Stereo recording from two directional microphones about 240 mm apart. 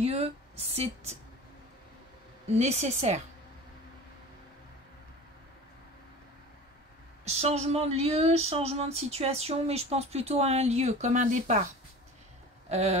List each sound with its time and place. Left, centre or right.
0.0 s speech: right
2.6 s speech: right
7.2 s speech: right
12.6 s a sound: right